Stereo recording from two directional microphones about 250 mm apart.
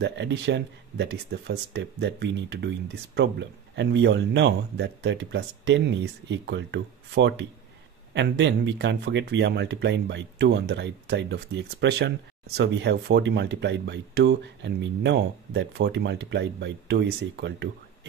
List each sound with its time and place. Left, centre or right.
0.0 s speech: right